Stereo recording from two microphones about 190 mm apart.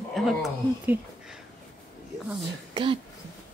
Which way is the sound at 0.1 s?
Centre (ahead or behind).